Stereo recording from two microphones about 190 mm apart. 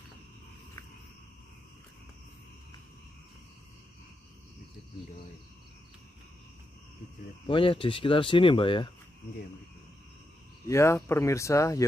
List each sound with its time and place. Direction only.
7.4 s speech: 30° left (ahead or behind)
10.7 s speech: 15° left (ahead or behind)